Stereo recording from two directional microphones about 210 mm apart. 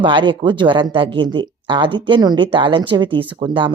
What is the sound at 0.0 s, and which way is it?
A woman's voice, 25° right (ahead or behind).